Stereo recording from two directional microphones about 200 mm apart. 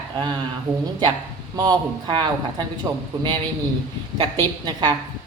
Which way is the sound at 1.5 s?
20° right (ahead or behind).